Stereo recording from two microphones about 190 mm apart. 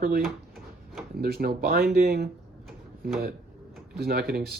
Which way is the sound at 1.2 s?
55° right (ahead or behind).